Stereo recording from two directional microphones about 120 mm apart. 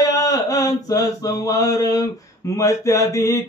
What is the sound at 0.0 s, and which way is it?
Mantra, 30° left (ahead or behind).